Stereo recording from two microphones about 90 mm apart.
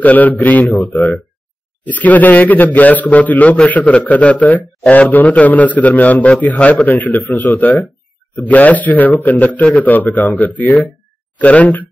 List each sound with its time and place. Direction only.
0.0 s a man's voice: 20° left (ahead or behind)
1.9 s a man's voice: 20° left (ahead or behind)